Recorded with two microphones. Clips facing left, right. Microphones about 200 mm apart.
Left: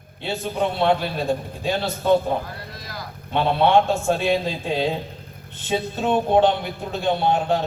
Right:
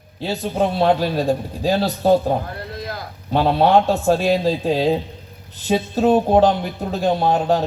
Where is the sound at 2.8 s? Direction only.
55° right (ahead or behind).